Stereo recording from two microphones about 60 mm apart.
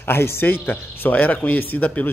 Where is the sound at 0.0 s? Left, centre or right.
Left.